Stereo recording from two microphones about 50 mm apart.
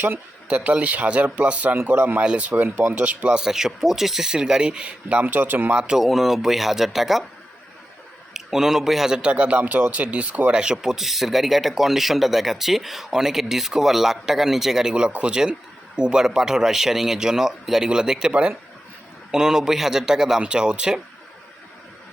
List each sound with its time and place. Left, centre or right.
0.4 s speech: right
2.2 s speech: right
2.5 s speech: right
3.4 s speech: centre; by 5.7 s right
5.7 s speech: centre
6.0 s speech: centre
8.3 s a man's voice: centre
9.1 s speech: right
9.6 s speech: right
10.5 s speech: centre
19.3 s speech: centre